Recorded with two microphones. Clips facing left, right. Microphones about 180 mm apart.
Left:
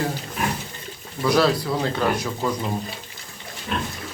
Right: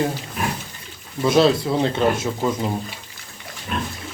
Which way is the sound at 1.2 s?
25° right (ahead or behind).